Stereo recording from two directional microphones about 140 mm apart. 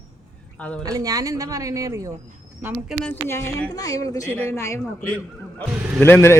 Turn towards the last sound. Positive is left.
turn(degrees=20)  # may be behind; listen again after turning